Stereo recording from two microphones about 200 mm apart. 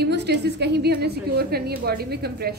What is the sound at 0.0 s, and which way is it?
A woman's voice, 55° right (ahead or behind).